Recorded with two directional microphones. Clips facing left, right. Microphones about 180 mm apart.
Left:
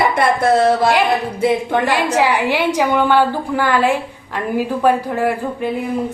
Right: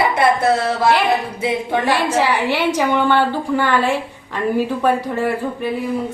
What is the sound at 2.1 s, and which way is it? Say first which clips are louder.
A woman's voice: left 2 dB; 15° left (ahead or behind).